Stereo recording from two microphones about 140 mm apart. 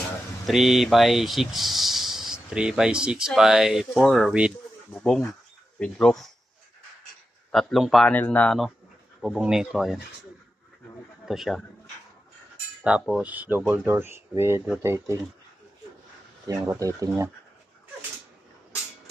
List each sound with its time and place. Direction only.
0.4 s speech: centre (ahead or behind)
4.9 s speech: 5° left (ahead or behind)
7.5 s speech: centre (ahead or behind)
9.2 s speech: 5° right (ahead or behind)
11.3 s speech: centre (ahead or behind)
12.8 s speech: 5° right (ahead or behind)
16.5 s speech: 25° right (ahead or behind)